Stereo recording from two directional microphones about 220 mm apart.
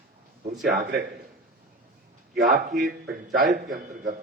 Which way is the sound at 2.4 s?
40° right (ahead or behind).